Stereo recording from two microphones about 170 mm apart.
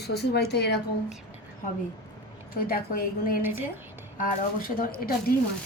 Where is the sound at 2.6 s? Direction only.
60° left (ahead or behind).